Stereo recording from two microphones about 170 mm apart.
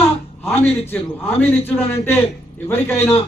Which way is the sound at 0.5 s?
35° left (ahead or behind).